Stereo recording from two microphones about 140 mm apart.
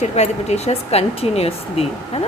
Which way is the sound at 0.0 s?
50° left (ahead or behind).